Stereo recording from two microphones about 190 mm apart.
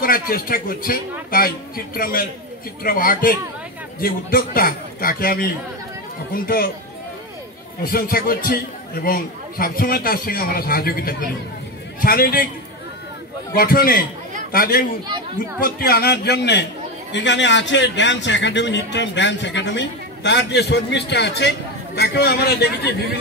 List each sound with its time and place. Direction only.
0.0 s a man's voice: 50° left (ahead or behind)
2.0 s a man's voice: 50° left (ahead or behind)
7.8 s a man's voice: 50° left (ahead or behind)
13.6 s a man's voice: 50° left (ahead or behind)